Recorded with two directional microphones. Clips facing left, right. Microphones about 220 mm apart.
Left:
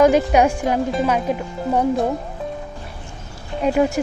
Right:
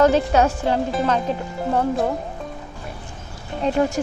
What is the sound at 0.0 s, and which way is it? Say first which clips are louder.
Speech: left 2 dB; 10° left (ahead or behind).